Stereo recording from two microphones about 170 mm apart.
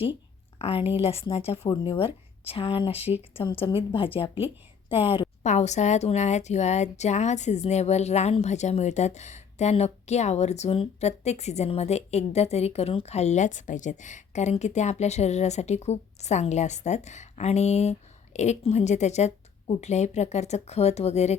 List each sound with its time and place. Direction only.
0.6 s a woman's voice: 35° left (ahead or behind)